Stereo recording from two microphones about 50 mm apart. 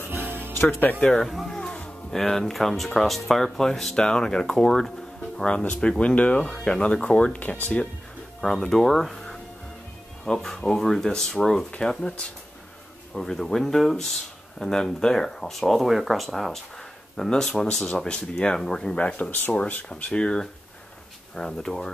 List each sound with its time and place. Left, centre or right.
0.2 s music: right
0.5 s speech: left
2.0 s speech: centre; by 6.4 s left
6.4 s speech: centre
7.3 s speech: left
8.4 s speech: centre
10.2 s speech: centre
17.2 s speech: centre
18.9 s speech: left
21.4 s speech: centre